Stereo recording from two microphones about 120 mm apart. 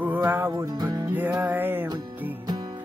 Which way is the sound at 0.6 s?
35° right (ahead or behind).